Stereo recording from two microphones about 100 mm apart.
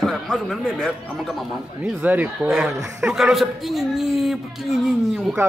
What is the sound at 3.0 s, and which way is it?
A man's voice, 5° right (ahead or behind).